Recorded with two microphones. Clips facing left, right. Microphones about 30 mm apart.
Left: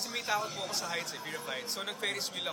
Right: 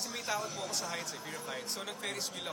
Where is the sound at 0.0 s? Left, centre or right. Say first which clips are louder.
Left 3 dB; left.